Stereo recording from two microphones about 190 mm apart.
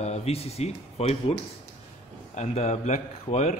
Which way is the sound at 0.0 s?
35° left (ahead or behind).